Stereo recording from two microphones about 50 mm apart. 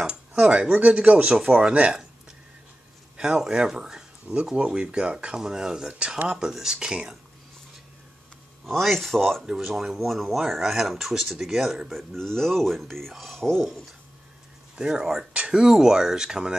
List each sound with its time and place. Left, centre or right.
0.3 s a sound: centre
0.7 s speech: right
3.2 s speech: centre
8.6 s speech: centre
9.5 s speech: centre
14.8 s speech: centre